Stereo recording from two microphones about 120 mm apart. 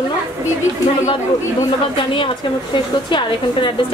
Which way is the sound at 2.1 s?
45° left (ahead or behind).